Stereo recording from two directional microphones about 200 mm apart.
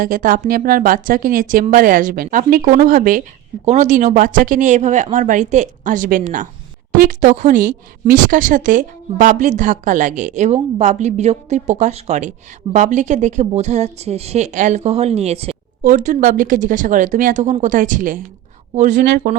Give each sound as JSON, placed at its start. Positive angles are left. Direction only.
{"t": 0.0, "sound": "speech", "side_deg": -45}